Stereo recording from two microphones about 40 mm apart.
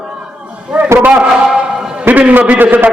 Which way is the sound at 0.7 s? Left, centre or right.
Right.